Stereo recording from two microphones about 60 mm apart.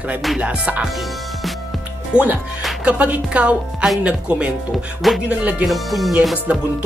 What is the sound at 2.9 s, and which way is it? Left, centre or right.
Speech, right.